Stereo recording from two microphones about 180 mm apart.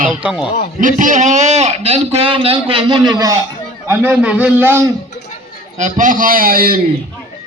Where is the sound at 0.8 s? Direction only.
45° right (ahead or behind); by 4.9 s 10° right (ahead or behind).